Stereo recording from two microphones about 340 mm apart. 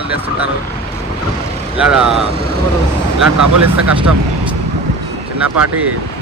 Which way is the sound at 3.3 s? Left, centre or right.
Right.